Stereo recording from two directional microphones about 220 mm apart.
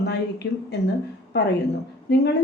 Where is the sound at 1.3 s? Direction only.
50° left (ahead or behind).